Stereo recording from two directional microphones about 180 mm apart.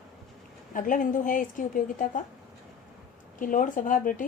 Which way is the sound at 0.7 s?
45° left (ahead or behind).